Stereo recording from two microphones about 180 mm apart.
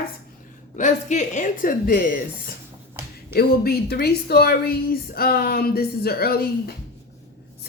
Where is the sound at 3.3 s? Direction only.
60° left (ahead or behind).